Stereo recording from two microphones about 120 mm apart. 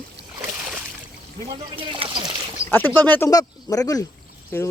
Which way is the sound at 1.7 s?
45° right (ahead or behind).